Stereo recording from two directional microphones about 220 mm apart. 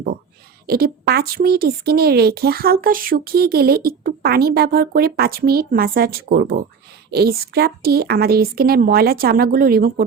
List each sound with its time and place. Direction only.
0.7 s speech: 45° right (ahead or behind)